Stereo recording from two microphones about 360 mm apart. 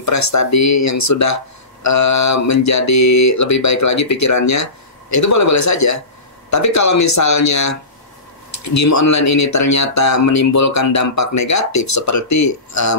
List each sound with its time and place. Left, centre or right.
0.0 s speech: left